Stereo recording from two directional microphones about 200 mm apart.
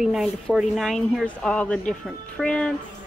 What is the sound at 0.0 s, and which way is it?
Speech, centre (ahead or behind).